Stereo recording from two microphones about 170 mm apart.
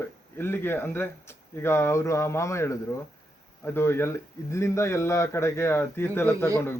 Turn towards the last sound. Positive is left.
turn(degrees=15)  # may be behind; listen again after turning